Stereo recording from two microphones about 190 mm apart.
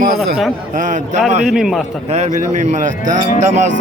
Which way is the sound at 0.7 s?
45° right (ahead or behind).